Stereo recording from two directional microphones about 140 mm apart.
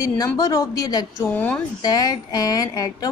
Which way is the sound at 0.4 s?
25° left (ahead or behind).